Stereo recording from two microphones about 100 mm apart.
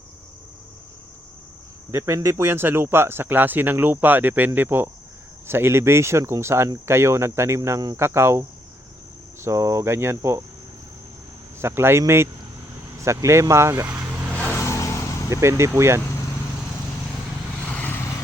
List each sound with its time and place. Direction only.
1.9 s speech: 30° right (ahead or behind)
11.6 s speech: 25° right (ahead or behind)
13.8 s vehicle: 20° right (ahead or behind)
14.5 s vehicle: 30° left (ahead or behind)
15.3 s speech: 30° right (ahead or behind)
17.7 s vehicle: 15° left (ahead or behind)